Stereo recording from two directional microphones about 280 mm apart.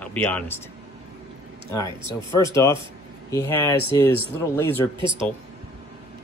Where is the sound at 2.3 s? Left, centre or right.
Centre.